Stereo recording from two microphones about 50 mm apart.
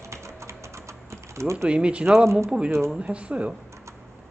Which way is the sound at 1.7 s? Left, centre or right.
Right.